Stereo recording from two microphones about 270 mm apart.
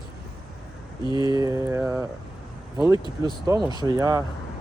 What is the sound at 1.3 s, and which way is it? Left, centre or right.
Speech, centre.